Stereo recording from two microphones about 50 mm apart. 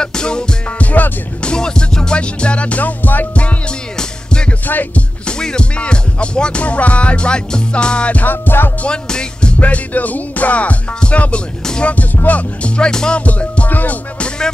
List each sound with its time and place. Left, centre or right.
0.0 s music: centre
0.7 s music: left
1.4 s music: centre; by 5.0 s left
5.2 s music: centre
8.3 s music: left
8.8 s music: centre
9.6 s music: left; by 13.2 s centre
13.2 s music: left